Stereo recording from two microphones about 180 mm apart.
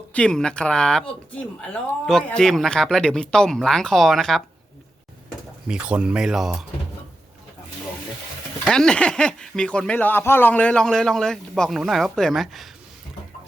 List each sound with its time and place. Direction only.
0.1 s speech: 5° left (ahead or behind)
5.6 s speech: 5° right (ahead or behind)
8.6 s speech: 5° left (ahead or behind)